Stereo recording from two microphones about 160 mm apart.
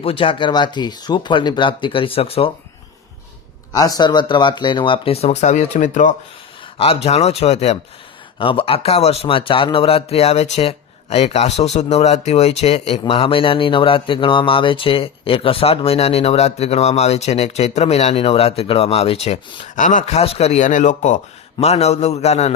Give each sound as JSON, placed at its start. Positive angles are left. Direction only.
{"t": 0.0, "sound": "a man's voice", "side_deg": 35}
{"t": 3.7, "sound": "a man's voice", "side_deg": 25}
{"t": 6.7, "sound": "a man's voice", "side_deg": 40}